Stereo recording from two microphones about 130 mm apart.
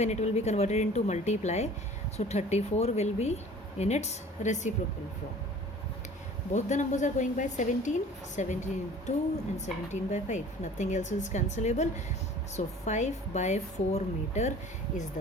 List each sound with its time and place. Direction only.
0.0 s speech: 60° left (ahead or behind)
6.5 s a woman's voice: 65° left (ahead or behind)